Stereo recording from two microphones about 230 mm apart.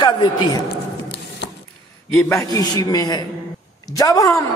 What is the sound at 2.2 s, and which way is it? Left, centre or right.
A man's voice, centre.